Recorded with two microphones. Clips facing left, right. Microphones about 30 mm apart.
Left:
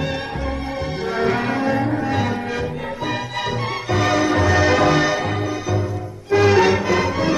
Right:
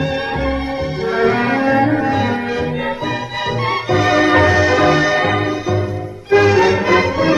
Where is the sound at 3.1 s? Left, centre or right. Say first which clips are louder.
Right 3 dB; centre.